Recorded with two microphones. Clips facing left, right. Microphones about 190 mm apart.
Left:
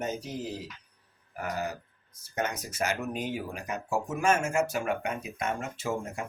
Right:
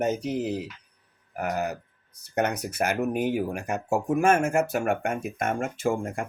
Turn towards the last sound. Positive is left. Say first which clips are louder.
# right 6 dB
turn(degrees=-50)  # may be behind; listen again after turning